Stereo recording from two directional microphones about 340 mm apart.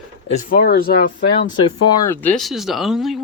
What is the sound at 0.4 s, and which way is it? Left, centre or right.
Speech, left.